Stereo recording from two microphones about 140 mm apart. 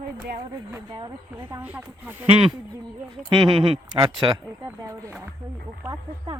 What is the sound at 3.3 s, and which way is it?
Speech, 35° right (ahead or behind).